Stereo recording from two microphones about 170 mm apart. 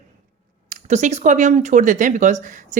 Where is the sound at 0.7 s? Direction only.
45° right (ahead or behind).